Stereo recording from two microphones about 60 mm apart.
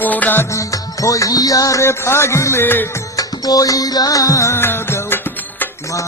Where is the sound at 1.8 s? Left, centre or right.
Left.